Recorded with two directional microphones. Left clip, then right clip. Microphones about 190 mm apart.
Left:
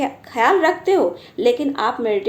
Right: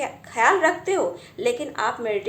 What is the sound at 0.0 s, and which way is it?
A woman's voice, 50° left (ahead or behind).